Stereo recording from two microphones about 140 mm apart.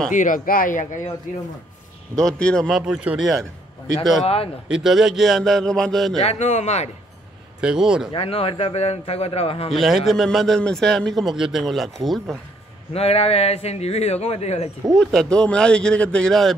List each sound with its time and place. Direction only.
0.1 s speech: 70° left (ahead or behind)
2.1 s a man's voice: 5° left (ahead or behind)
4.6 s a man's voice: 5° right (ahead or behind)
6.2 s a man's voice: 55° left (ahead or behind)
7.6 s a man's voice: 5° right (ahead or behind)
8.1 s a man's voice: 45° left (ahead or behind)
9.7 s a man's voice: centre (ahead or behind)
12.9 s a man's voice: 45° left (ahead or behind)
15.0 s speech: 5° left (ahead or behind)